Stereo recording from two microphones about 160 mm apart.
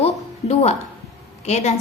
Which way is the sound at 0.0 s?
45° left (ahead or behind).